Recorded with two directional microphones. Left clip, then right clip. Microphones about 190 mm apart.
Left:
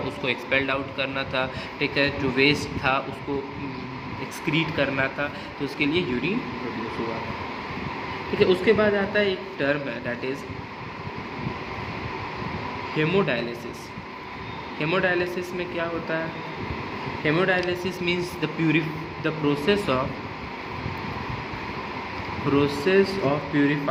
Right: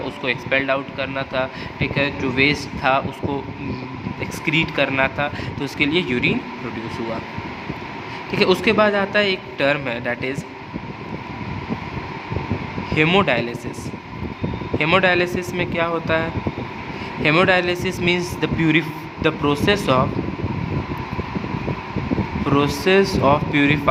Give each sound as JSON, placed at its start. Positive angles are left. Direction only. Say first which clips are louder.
{"t": 0.3, "sound": "speech", "louder": "right 5 dB", "side_deg": -20}
{"t": 4.4, "sound": "speech", "louder": "right 5 dB", "side_deg": -30}
{"t": 8.4, "sound": "a man's voice", "louder": "right 4 dB", "side_deg": -45}
{"t": 13.0, "sound": "speech", "louder": "right 7 dB", "side_deg": -40}
{"t": 14.8, "sound": "speech", "louder": "right 7 dB", "side_deg": -40}
{"t": 17.2, "sound": "speech", "louder": "right 7 dB", "side_deg": -45}
{"t": 22.5, "sound": "speech", "louder": "right 4 dB", "side_deg": -35}